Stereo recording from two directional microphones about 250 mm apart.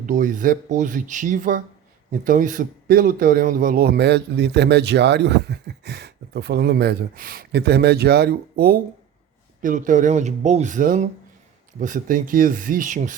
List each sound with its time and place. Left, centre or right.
0.0 s speech: right